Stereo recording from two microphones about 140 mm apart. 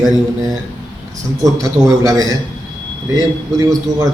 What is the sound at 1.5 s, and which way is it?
Speech, 25° right (ahead or behind).